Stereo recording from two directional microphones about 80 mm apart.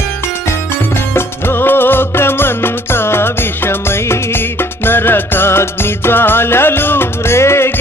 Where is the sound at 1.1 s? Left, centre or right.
Left.